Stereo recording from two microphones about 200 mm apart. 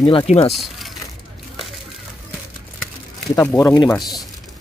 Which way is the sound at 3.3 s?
15° left (ahead or behind).